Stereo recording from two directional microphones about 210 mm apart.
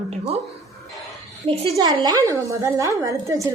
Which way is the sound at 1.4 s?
30° right (ahead or behind).